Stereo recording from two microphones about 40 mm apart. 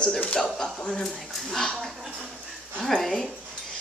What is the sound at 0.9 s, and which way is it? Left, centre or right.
Speech, centre.